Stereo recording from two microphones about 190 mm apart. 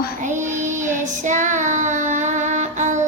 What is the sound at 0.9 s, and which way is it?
Child singing, 40° right (ahead or behind).